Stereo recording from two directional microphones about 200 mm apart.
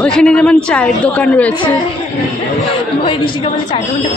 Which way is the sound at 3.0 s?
25° left (ahead or behind).